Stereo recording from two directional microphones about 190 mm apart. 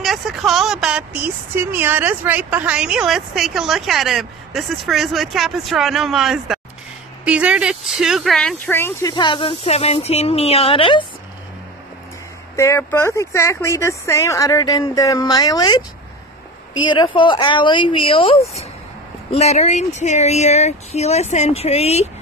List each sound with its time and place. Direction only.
0.0 s a woman's voice: centre (ahead or behind)
9.1 s speech: 25° left (ahead or behind)
12.5 s speech: 15° left (ahead or behind); by 22.1 s 35° left (ahead or behind)